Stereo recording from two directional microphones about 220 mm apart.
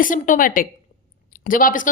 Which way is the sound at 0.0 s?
40° left (ahead or behind).